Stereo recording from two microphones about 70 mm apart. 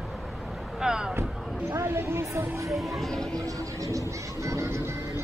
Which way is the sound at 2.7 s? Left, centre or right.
Centre.